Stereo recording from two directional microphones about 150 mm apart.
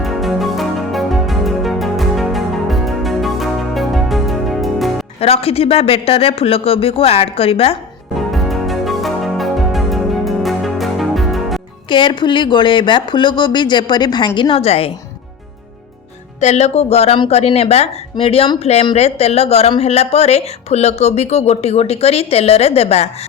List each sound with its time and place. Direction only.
0.0 s music: centre (ahead or behind)
5.2 s speech: 40° left (ahead or behind)
8.1 s music: centre (ahead or behind)
11.9 s speech: 30° left (ahead or behind)
16.4 s speech: 50° left (ahead or behind)